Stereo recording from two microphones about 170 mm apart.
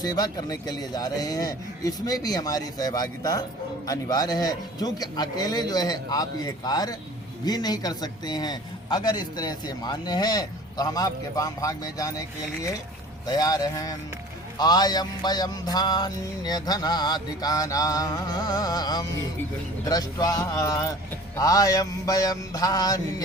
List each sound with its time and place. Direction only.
0.0 s a man's voice: 25° left (ahead or behind)
13.2 s a man's voice: 25° left (ahead or behind)